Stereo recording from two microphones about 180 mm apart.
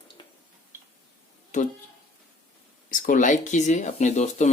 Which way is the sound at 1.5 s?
40° left (ahead or behind).